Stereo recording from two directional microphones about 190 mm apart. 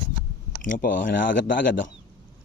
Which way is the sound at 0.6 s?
45° left (ahead or behind).